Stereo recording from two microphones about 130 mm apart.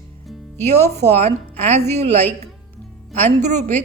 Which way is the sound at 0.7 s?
55° right (ahead or behind).